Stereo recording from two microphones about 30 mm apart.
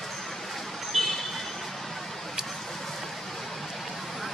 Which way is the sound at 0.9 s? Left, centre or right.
Centre.